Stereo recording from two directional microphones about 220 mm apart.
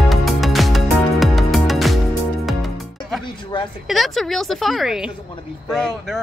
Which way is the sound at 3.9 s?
Centre (ahead or behind).